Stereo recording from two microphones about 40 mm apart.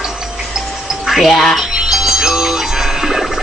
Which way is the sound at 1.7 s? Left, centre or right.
Centre.